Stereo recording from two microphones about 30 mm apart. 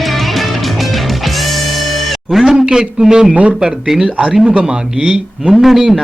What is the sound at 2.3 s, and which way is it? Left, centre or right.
Speech, centre.